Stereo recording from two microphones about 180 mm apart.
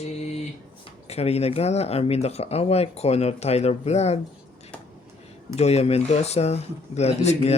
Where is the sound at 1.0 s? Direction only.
35° left (ahead or behind).